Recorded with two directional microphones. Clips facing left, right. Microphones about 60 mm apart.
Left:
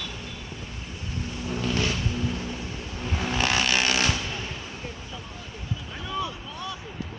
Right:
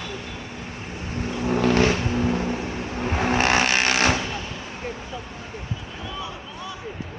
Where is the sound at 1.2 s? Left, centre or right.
Right.